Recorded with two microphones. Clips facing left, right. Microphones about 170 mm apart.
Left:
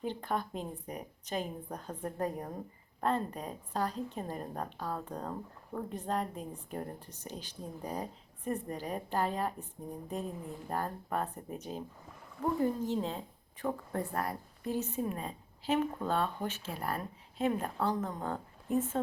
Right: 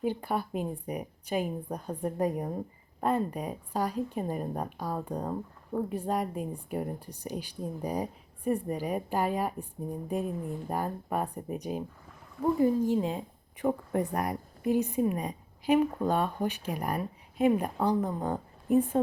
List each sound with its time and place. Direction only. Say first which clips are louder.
0.0 s a woman's voice: right 4 dB; 10° right (ahead or behind)